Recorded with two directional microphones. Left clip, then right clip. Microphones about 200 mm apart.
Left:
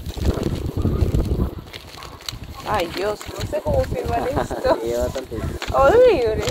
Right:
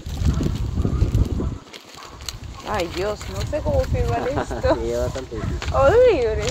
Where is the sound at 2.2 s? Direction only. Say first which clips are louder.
Left 3 dB; 5° left (ahead or behind).